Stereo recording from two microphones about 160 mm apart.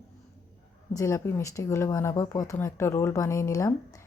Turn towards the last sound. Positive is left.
turn(degrees=20)  # may be behind; listen again after turning